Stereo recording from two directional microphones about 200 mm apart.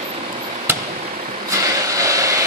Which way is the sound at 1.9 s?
15° right (ahead or behind).